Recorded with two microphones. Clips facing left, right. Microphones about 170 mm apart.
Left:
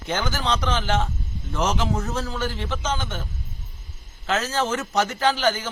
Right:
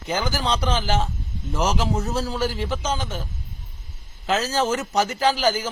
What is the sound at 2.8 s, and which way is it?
Speech, 35° right (ahead or behind).